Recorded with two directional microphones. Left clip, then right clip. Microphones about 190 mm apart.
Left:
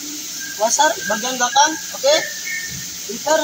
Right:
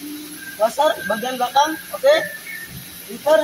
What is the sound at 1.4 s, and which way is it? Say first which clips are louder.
Speech: left 3 dB; 15° right (ahead or behind).